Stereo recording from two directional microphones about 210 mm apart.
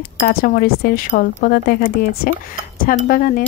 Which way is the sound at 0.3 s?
45° left (ahead or behind).